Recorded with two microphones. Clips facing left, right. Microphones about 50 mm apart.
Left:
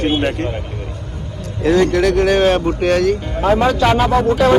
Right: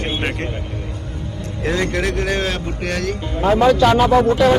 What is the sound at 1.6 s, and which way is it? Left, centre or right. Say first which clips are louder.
Speech: left 7 dB; right.